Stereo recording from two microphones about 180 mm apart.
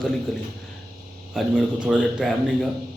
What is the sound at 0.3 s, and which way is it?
A man's voice, centre (ahead or behind).